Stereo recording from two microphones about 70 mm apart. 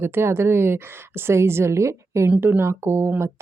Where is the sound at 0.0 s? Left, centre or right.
Right.